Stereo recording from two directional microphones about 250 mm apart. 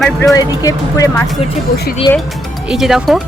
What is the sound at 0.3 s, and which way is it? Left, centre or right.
Speech, centre.